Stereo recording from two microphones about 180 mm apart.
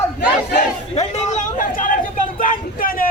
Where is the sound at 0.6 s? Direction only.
40° left (ahead or behind).